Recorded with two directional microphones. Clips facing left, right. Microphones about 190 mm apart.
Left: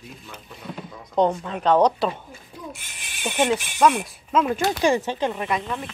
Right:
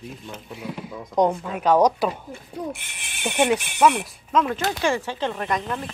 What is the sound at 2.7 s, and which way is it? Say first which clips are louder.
Speech: right 1 dB; 60° right (ahead or behind).